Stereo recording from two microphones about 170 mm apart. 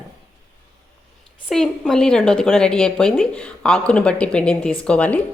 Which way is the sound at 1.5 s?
Centre (ahead or behind).